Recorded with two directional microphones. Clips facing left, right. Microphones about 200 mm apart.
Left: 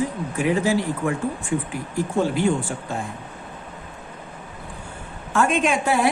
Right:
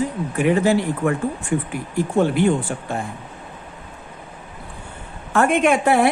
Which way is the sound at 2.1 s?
60° right (ahead or behind).